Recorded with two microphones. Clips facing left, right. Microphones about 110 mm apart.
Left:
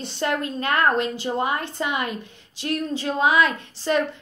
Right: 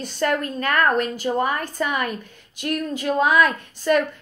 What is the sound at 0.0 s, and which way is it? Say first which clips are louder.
Speech: right 2 dB; 20° left (ahead or behind).